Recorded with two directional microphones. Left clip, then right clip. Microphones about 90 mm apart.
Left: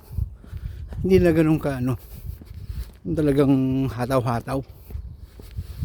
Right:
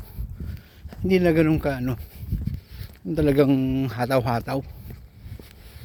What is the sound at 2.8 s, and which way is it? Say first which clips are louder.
Zipper: even; 35° left (ahead or behind).